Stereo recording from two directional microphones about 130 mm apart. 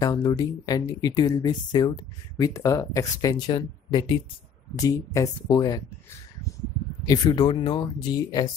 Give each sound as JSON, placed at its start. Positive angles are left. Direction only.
{"t": 0.0, "sound": "speech", "side_deg": 30}
{"t": 7.1, "sound": "speech", "side_deg": 35}